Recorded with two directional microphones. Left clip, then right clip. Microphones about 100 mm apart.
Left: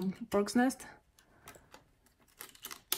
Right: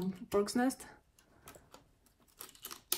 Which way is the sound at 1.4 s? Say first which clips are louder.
Left 2 dB; 10° left (ahead or behind).